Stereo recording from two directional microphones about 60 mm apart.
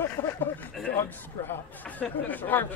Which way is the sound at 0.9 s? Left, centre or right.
Left.